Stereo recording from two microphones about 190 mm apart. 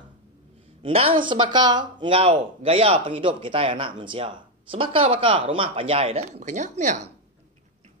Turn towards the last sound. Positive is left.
turn(degrees=-40)  # may be behind; listen again after turning